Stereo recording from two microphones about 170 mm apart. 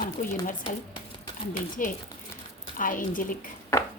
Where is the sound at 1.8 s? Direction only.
50° left (ahead or behind).